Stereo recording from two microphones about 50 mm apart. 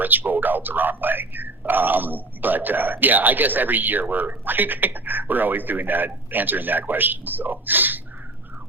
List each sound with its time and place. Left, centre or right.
0.0 s speech: right